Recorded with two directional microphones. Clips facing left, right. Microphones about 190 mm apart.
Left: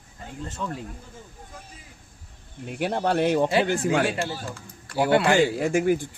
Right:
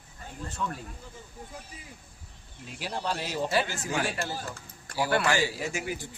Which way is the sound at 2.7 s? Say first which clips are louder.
Left 9 dB; 60° left (ahead or behind).